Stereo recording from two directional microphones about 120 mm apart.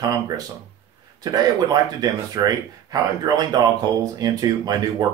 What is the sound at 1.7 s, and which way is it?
Speech, 30° right (ahead or behind).